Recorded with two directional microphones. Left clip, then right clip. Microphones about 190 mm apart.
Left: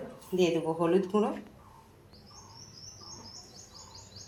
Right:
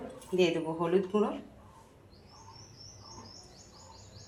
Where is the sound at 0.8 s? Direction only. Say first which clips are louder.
Left 1 dB; 10° left (ahead or behind).